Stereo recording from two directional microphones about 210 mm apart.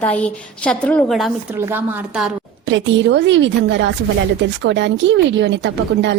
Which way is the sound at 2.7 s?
60° right (ahead or behind).